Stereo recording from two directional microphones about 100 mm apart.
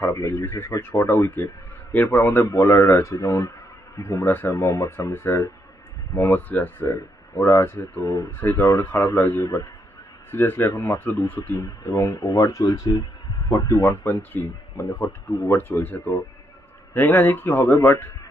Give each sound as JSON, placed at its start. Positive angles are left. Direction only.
{"t": 0.1, "sound": "a man's voice", "side_deg": 30}
{"t": 8.3, "sound": "a man's voice", "side_deg": 20}
{"t": 9.4, "sound": "speech", "side_deg": 35}
{"t": 10.3, "sound": "a man's voice", "side_deg": 20}
{"t": 11.6, "sound": "a man's voice", "side_deg": 35}